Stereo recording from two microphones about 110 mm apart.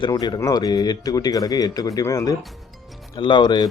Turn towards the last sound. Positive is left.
turn(degrees=40)  # may be behind; listen again after turning